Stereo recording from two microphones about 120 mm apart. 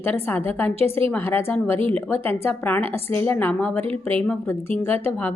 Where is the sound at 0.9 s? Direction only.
15° left (ahead or behind).